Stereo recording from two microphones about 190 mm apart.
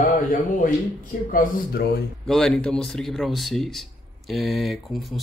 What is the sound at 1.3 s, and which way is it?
Speech, 55° left (ahead or behind).